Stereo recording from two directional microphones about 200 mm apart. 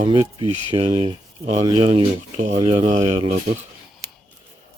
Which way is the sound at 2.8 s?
35° right (ahead or behind).